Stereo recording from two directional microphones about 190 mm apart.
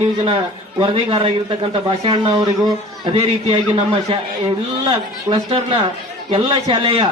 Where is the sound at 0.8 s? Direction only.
30° right (ahead or behind).